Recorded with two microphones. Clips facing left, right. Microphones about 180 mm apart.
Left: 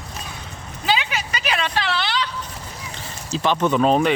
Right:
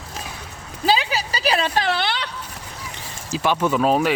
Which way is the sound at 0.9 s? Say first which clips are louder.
Right 2 dB; 35° right (ahead or behind).